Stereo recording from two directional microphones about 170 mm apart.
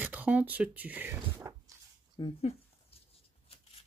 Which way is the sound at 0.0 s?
10° right (ahead or behind).